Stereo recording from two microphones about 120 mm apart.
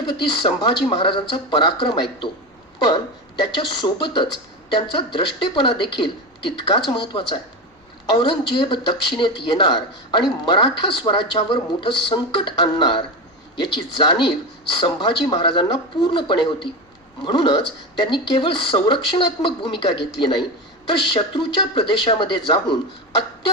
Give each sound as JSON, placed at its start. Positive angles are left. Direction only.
{"t": 0.1, "sound": "speech", "side_deg": 40}